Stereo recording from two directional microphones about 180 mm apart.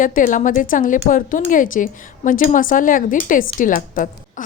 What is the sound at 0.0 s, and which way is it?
Speech, 50° left (ahead or behind).